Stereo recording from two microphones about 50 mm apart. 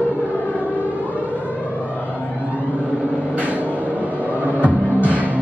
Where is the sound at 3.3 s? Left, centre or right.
Right.